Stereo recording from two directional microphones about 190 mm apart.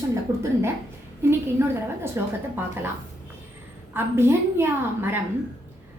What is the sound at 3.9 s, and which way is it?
A woman's voice, 15° right (ahead or behind).